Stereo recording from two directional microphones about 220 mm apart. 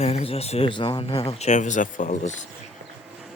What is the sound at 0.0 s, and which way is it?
Speech, 30° left (ahead or behind).